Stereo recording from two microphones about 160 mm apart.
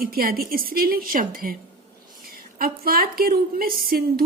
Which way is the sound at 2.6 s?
70° right (ahead or behind).